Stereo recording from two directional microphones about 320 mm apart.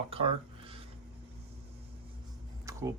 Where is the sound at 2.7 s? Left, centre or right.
Centre.